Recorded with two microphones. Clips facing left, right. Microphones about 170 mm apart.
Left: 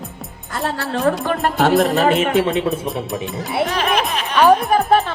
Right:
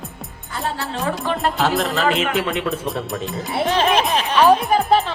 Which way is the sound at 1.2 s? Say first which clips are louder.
Left 3 dB; 50° left (ahead or behind).